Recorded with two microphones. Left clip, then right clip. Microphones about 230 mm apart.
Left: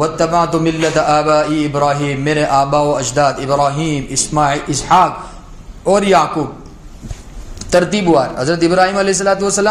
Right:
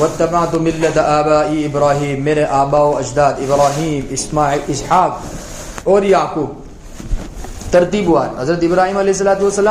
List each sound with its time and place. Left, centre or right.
0.2 s a man's voice: left
7.7 s a man's voice: left